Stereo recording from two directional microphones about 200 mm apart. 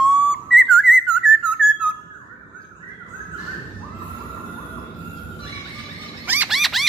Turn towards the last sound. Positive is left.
turn(degrees=0)  # may be behind; listen again after turning